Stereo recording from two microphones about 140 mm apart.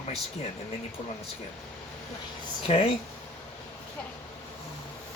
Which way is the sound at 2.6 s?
45° left (ahead or behind).